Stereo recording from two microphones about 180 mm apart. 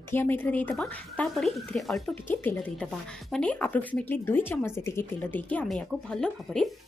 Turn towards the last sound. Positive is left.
turn(degrees=5)  # may be behind; listen again after turning